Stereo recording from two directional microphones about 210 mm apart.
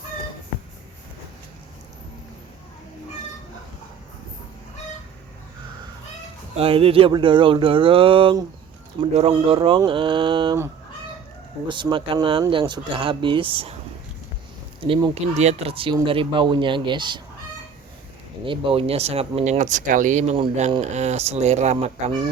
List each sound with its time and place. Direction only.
6.6 s speech: 25° right (ahead or behind)
11.7 s speech: 20° right (ahead or behind)
14.8 s speech: 25° right (ahead or behind)
18.4 s speech: 25° right (ahead or behind)